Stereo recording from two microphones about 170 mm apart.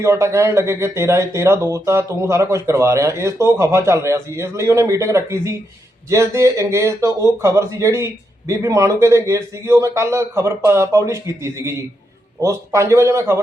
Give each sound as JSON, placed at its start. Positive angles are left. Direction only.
{"t": 0.0, "sound": "speech", "side_deg": -15}